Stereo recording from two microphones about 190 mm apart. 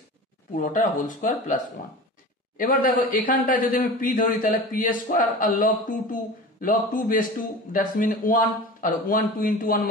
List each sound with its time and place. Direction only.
0.6 s a man's voice: 45° left (ahead or behind)